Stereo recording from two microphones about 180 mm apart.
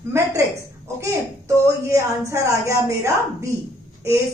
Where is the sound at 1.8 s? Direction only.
15° right (ahead or behind).